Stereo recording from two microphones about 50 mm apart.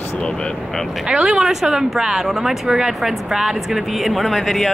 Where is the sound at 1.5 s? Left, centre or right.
Centre.